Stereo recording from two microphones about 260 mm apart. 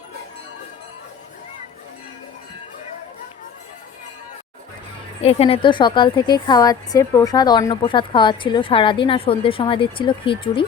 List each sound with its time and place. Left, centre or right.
5.2 s a woman's voice: left